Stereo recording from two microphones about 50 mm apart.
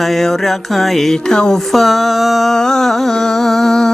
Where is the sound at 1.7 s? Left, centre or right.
Centre.